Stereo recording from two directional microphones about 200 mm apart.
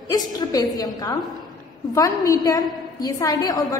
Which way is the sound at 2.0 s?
15° left (ahead or behind).